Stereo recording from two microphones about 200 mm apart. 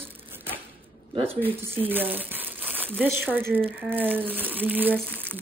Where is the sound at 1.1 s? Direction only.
30° right (ahead or behind).